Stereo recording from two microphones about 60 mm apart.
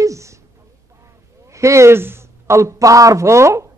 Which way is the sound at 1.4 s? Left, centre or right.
Right.